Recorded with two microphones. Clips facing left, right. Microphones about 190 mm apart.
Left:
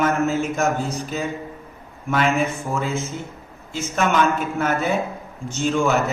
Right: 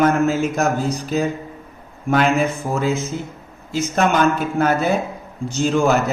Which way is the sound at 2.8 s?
40° right (ahead or behind).